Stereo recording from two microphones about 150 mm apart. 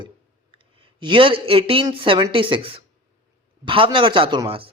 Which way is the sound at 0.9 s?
30° right (ahead or behind).